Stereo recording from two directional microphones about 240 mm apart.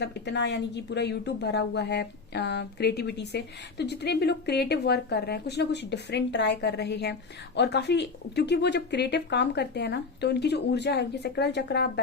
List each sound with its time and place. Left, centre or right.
0.0 s a woman's voice: left